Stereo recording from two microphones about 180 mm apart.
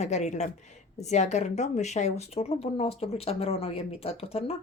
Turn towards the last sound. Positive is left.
turn(degrees=35)  # may be behind; listen again after turning